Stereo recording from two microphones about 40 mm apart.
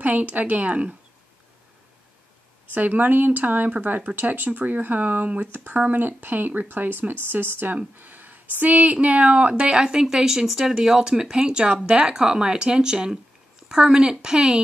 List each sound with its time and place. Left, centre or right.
0.0 s speech: right
2.7 s speech: right; by 14.6 s centre